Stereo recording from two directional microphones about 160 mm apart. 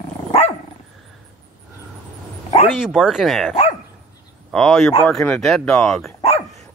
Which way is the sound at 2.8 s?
5° right (ahead or behind).